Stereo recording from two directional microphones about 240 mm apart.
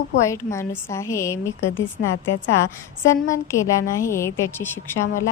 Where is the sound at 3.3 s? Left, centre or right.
Centre.